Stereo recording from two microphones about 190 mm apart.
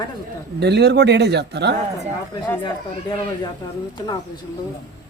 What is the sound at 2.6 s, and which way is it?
Speech, 25° left (ahead or behind).